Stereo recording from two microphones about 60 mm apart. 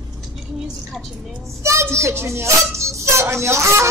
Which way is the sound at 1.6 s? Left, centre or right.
Right.